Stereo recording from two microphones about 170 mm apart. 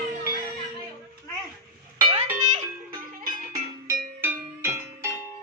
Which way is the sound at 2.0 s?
40° right (ahead or behind).